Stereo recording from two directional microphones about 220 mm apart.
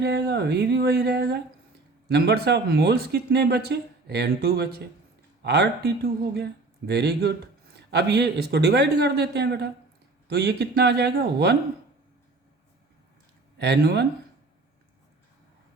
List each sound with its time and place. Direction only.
0.0 s speech: 50° right (ahead or behind)
13.6 s speech: 50° right (ahead or behind)